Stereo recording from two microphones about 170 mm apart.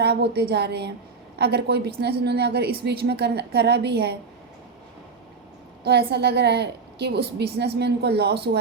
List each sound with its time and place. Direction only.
0.0 s a woman's voice: 80° right
5.8 s a woman's voice: 70° right (ahead or behind)